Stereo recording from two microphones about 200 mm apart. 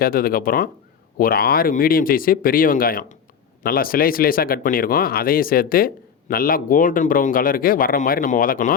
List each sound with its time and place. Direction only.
0.0 s speech: 45° left (ahead or behind)